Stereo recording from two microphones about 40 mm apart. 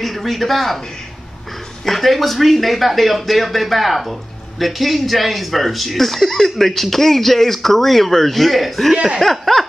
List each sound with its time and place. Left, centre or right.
0.0 s speech: centre
1.9 s speech: centre
8.9 s speech: centre
9.2 s a sound: centre